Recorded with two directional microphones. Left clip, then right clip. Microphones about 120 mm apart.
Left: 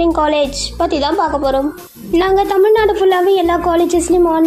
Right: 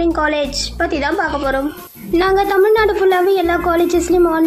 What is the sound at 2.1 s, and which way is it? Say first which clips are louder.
A woman's voice: left 1 dB; 25° left (ahead or behind).